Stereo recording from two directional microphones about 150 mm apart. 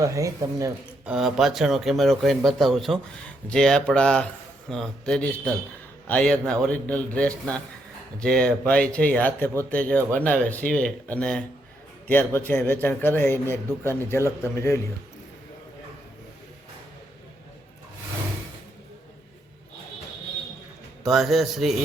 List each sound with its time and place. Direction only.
0.0 s speech: 20° right (ahead or behind)
1.0 s a man's voice: 5° right (ahead or behind); by 14.8 s 15° left (ahead or behind)
21.0 s speech: centre (ahead or behind)